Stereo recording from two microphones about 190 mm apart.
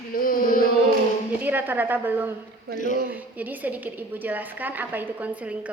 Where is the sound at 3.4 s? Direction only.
10° right (ahead or behind).